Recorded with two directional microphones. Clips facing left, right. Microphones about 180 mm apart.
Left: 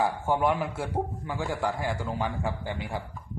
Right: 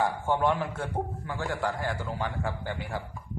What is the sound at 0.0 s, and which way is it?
A man's voice, 10° left (ahead or behind).